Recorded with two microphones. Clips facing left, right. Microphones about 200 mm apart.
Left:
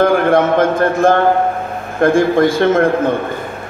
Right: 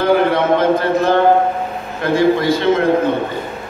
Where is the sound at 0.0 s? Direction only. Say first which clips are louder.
Left 2 dB; 50° left (ahead or behind).